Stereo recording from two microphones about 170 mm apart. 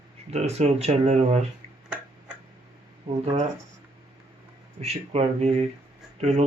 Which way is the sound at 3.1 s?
35° right (ahead or behind).